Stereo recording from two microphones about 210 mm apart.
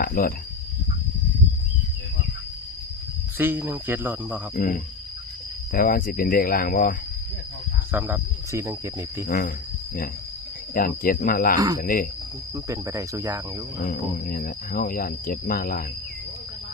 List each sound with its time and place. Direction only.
0.0 s cricket: 45° left (ahead or behind)
3.3 s speech: 10° right (ahead or behind)
4.5 s speech: 40° left (ahead or behind)
5.7 s cricket: 45° left (ahead or behind)
7.9 s speech: 10° right (ahead or behind)
10.8 s cricket: 45° left (ahead or behind)
11.8 s speech: 40° left (ahead or behind)
12.5 s speech: 15° right (ahead or behind)
13.8 s cricket: 45° left (ahead or behind)